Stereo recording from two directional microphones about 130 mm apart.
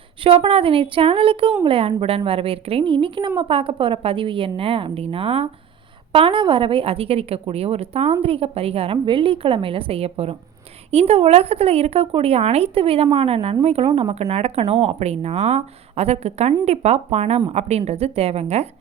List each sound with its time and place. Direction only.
0.2 s speech: 45° right (ahead or behind)